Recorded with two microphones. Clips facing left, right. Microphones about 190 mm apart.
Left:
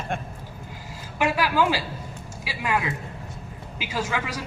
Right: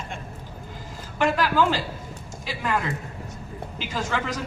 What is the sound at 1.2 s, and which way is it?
A man's voice, 10° left (ahead or behind).